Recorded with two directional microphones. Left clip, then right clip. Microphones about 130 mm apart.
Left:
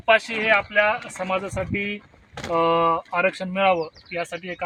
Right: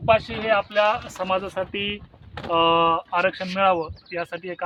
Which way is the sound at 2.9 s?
40° left (ahead or behind).